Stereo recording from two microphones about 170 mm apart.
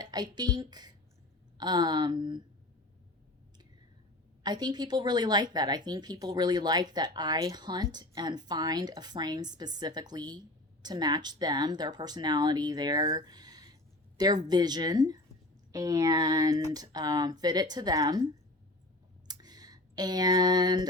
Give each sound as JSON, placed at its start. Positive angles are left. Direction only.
{"t": 0.0, "sound": "a woman's voice", "side_deg": -25}
{"t": 4.4, "sound": "a woman's voice", "side_deg": -25}
{"t": 19.3, "sound": "a sound", "side_deg": -25}